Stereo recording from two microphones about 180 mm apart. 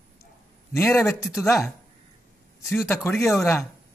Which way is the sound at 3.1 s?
15° left (ahead or behind).